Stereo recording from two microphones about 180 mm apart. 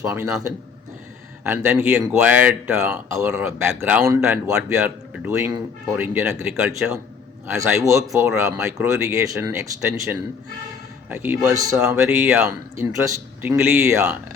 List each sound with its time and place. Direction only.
0.0 s speech: 15° right (ahead or behind)
1.5 s speech: 10° right (ahead or behind)
7.4 s speech: 15° right (ahead or behind)